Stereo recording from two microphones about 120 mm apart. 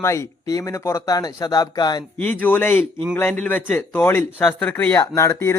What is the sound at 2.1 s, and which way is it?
A man's voice, 15° left (ahead or behind).